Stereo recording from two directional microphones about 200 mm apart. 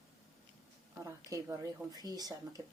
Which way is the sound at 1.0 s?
15° right (ahead or behind).